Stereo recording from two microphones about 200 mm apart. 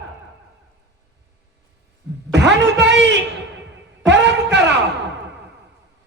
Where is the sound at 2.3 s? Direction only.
60° right (ahead or behind).